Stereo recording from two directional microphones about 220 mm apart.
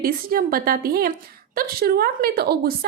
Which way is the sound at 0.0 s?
40° right (ahead or behind).